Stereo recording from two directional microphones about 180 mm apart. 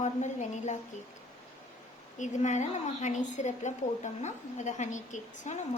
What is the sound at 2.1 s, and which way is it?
A woman's voice, 40° left (ahead or behind).